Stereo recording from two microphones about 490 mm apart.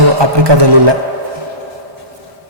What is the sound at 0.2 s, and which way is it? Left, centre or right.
Speech, right.